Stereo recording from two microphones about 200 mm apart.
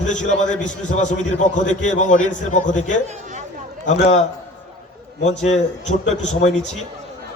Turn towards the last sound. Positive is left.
turn(degrees=35)  # may be behind; listen again after turning